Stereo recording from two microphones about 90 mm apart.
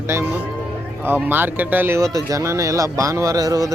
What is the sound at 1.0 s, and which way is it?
Speech, 20° right (ahead or behind).